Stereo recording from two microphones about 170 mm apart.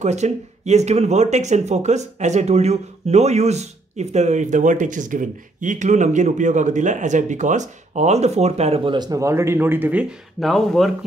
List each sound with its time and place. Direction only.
0.0 s speech: 40° right (ahead or behind); by 10.9 s centre (ahead or behind)